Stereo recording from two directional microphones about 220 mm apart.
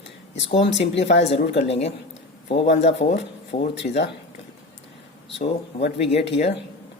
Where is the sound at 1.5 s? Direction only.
30° left (ahead or behind).